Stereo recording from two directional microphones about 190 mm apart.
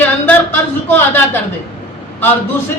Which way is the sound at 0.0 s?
10° left (ahead or behind).